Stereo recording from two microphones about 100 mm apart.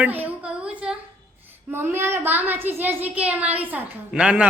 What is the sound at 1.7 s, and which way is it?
A child's voice, 25° right (ahead or behind).